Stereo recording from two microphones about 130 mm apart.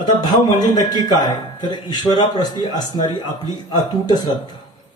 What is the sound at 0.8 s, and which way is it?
A man's voice, 30° left (ahead or behind).